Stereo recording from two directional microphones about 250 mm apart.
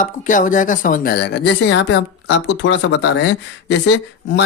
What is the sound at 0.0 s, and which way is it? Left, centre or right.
Speech, left.